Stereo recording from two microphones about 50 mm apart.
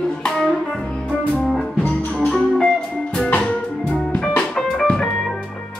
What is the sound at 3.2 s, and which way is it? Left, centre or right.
Music, left.